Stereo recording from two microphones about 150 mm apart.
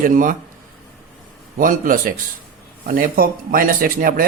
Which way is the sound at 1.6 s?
65° right (ahead or behind).